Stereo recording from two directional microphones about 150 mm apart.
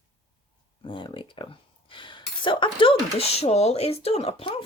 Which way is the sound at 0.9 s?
35° left (ahead or behind).